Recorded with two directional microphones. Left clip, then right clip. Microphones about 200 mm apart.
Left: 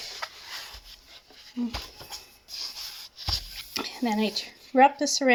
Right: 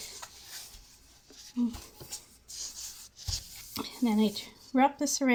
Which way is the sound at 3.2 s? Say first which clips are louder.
Left 9 dB; 5° right (ahead or behind).